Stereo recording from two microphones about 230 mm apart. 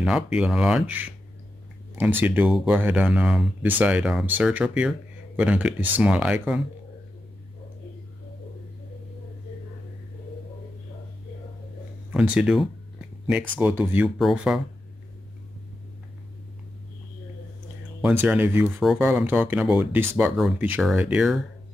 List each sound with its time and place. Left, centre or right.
0.0 s speech: centre
12.1 s speech: centre
18.0 s speech: centre